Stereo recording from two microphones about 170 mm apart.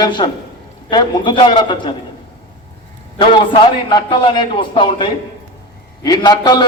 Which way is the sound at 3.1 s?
30° left (ahead or behind).